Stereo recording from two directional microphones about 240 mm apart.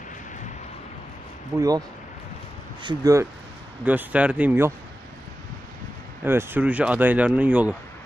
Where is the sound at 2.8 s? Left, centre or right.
Centre.